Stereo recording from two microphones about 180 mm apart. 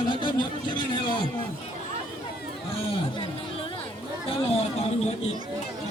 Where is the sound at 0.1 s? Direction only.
25° left (ahead or behind).